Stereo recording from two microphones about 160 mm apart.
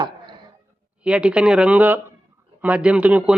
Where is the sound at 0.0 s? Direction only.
25° right (ahead or behind).